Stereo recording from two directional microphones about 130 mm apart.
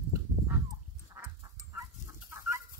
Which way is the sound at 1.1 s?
20° right (ahead or behind).